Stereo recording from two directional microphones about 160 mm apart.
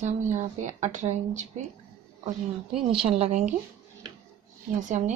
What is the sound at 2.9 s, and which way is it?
Speech, 35° right (ahead or behind).